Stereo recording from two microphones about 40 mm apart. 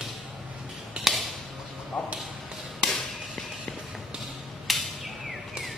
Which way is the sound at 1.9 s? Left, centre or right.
Left.